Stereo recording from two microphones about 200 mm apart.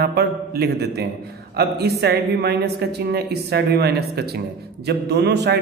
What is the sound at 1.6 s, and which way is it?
A woman's voice, 55° right (ahead or behind).